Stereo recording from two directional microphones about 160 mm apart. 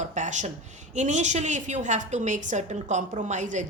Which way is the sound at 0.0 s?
50° right (ahead or behind).